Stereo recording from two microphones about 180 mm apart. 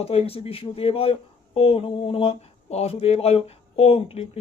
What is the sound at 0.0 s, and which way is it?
Speech, 35° left (ahead or behind).